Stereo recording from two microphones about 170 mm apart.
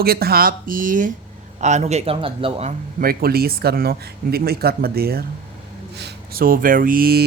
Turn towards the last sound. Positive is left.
turn(degrees=-65)  # may be behind; listen again after turning